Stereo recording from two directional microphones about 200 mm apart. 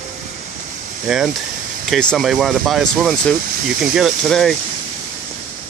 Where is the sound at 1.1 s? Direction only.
Centre (ahead or behind).